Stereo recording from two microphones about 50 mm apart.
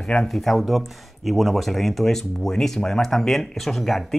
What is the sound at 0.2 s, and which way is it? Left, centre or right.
Speech, centre.